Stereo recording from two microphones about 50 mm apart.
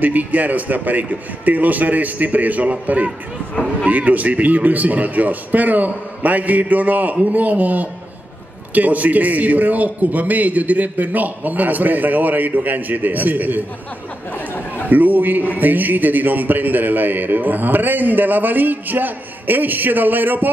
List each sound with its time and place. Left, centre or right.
0.0 s a man's voice: right
14.9 s a man's voice: right